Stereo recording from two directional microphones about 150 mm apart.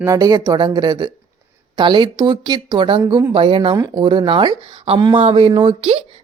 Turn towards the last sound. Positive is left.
turn(degrees=-35)  # may be behind; listen again after turning